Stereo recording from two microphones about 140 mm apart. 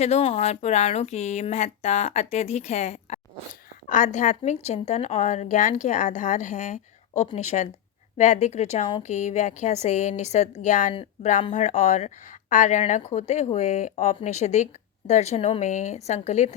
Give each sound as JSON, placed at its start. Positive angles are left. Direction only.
{"t": 0.0, "sound": "a woman's voice", "side_deg": 50}